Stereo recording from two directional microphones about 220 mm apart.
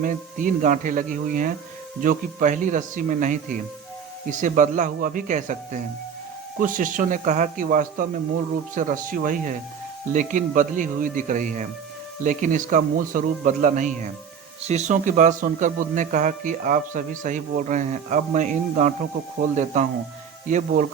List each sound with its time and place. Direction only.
0.0 s speech: 35° right (ahead or behind)